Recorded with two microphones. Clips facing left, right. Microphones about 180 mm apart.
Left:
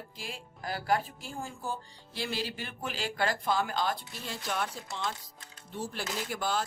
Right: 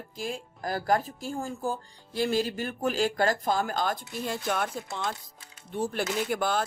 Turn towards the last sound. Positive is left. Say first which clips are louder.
# right 5 dB
turn(degrees=-55)  # may be behind; listen again after turning